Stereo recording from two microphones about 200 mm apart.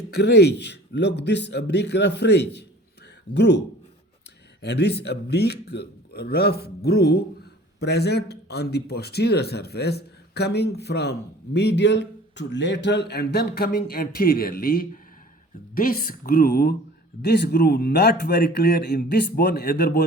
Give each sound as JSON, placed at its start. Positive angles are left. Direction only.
{"t": 0.1, "sound": "a man's voice", "side_deg": 55}
{"t": 4.6, "sound": "a man's voice", "side_deg": 55}